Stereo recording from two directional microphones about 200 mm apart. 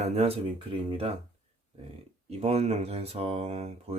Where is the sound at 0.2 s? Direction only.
30° right (ahead or behind).